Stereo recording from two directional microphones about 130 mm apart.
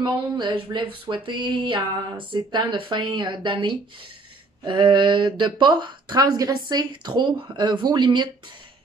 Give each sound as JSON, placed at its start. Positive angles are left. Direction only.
{"t": 0.0, "sound": "speech", "side_deg": -40}